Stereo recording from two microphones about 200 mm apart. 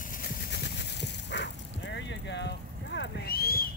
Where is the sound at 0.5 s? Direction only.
60° left (ahead or behind).